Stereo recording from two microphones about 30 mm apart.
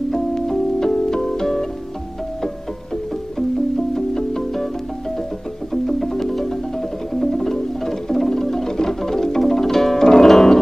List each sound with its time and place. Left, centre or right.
0.3 s music: centre
3.9 s music: centre
5.7 s music: centre